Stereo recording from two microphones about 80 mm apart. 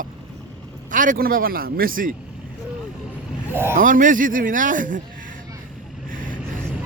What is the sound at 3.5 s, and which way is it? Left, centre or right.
Speech, right.